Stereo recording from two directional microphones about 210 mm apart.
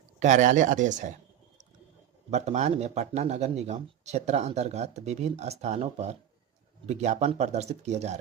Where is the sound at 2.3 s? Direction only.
30° right (ahead or behind).